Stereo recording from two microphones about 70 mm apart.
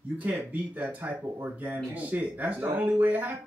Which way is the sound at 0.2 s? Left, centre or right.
Right.